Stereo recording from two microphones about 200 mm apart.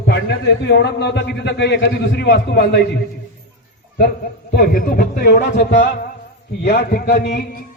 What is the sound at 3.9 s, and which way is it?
A man's voice, 50° left (ahead or behind).